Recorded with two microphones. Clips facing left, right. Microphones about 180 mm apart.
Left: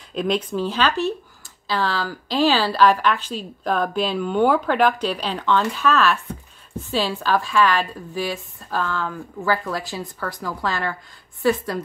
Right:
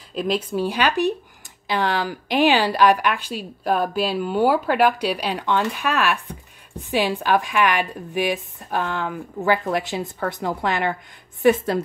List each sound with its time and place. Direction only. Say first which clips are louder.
0.1 s a woman's voice: left 1 dB; 5° right (ahead or behind); by 11.8 s 25° right (ahead or behind)